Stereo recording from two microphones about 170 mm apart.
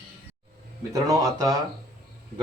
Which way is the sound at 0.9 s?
20° right (ahead or behind).